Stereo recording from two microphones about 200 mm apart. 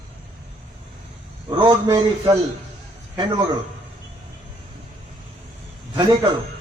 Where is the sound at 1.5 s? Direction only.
25° right (ahead or behind).